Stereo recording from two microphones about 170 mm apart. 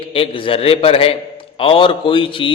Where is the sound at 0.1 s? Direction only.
30° left (ahead or behind).